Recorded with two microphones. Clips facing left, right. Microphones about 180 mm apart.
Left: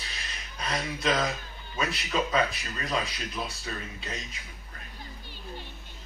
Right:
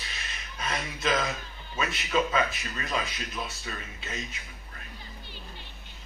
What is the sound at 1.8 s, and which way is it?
Speech, 35° left (ahead or behind).